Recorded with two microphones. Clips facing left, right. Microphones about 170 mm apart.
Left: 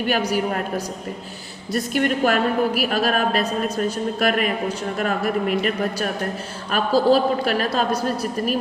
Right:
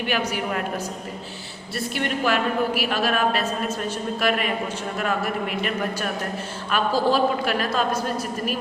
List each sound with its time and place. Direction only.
0.0 s a woman's voice: 40° left (ahead or behind)
1.7 s a woman's voice: 45° left (ahead or behind)